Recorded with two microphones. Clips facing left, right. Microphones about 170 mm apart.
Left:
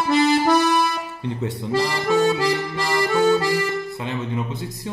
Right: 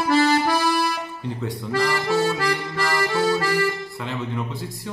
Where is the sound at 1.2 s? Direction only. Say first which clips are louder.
Left 4 dB; 20° left (ahead or behind).